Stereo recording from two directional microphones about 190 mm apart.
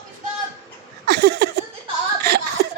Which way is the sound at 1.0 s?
60° right (ahead or behind).